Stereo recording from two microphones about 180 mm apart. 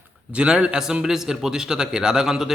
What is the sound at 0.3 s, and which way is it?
A man's voice, 5° right (ahead or behind).